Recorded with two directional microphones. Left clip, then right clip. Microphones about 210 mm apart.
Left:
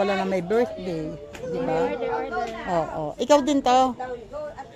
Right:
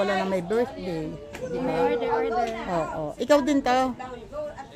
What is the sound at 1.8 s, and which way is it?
Speech, 45° right (ahead or behind).